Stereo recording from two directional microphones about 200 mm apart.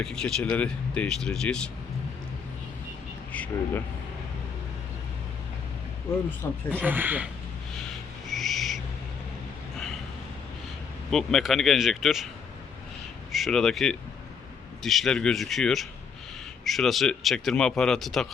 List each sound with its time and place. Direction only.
0.0 s speech: 5° left (ahead or behind)
3.3 s speech: 10° left (ahead or behind)
6.7 s speech: 10° right (ahead or behind)
8.3 s owl: centre (ahead or behind)
11.1 s speech: centre (ahead or behind)
13.3 s speech: centre (ahead or behind)